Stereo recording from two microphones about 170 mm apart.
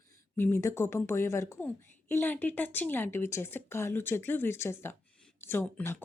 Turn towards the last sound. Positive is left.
turn(degrees=10)  # may be behind; listen again after turning